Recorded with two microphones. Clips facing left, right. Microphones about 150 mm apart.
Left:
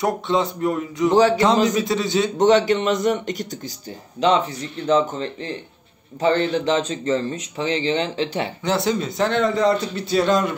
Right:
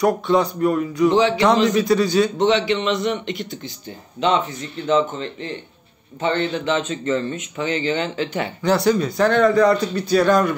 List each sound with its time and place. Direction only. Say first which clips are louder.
0.0 s speech: right 3 dB; 25° left (ahead or behind)
1.1 s speech: left 5 dB; 40° left (ahead or behind)
1.4 s speech: right 1 dB; 25° left (ahead or behind)
2.3 s speech: left 2 dB; 45° left (ahead or behind); by 10.5 s 25° left (ahead or behind)